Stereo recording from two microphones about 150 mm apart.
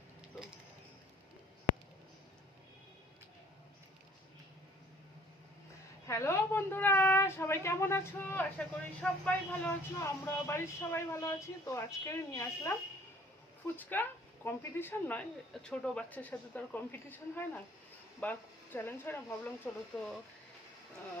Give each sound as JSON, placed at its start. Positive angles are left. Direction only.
{"t": 6.1, "sound": "a woman's voice", "side_deg": 20}
{"t": 13.7, "sound": "a woman's voice", "side_deg": 15}